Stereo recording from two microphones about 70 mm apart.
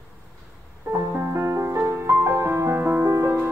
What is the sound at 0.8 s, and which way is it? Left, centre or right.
Music, right.